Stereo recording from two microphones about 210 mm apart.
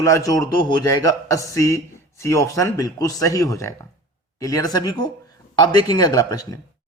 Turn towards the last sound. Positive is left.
turn(degrees=15)  # may be behind; listen again after turning